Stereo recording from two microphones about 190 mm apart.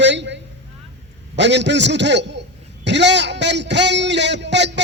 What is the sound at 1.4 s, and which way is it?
A man's voice, 65° right (ahead or behind).